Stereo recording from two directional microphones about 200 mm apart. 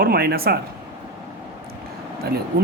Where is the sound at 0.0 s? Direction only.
50° right (ahead or behind).